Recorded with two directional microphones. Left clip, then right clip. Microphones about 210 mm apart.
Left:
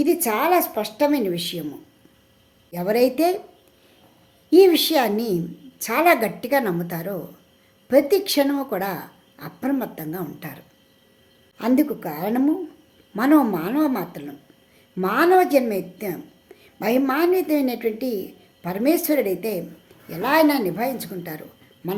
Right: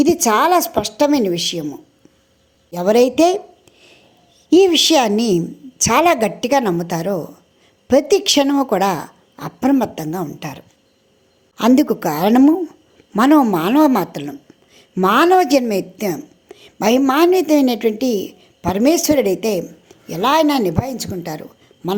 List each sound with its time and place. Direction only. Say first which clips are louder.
0.0 s a woman's voice: right 7 dB; 35° right (ahead or behind)
4.4 s a woman's voice: right 3 dB; 35° right (ahead or behind)
11.5 s a woman's voice: right 7 dB; 40° right (ahead or behind)